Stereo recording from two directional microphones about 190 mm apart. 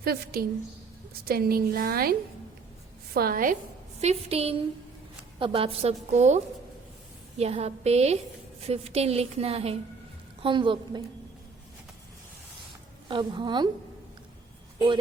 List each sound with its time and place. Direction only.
0.0 s a woman's voice: 50° right (ahead or behind)
3.2 s a woman's voice: 50° right (ahead or behind)
4.0 s a woman's voice: 35° right (ahead or behind)
13.1 s a woman's voice: 25° right (ahead or behind)